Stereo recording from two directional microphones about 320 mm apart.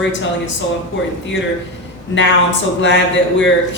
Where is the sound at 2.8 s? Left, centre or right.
Left.